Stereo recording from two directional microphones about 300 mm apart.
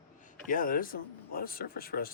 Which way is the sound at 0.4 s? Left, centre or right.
Left.